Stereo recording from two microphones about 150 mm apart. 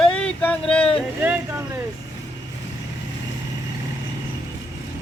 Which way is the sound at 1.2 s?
15° right (ahead or behind).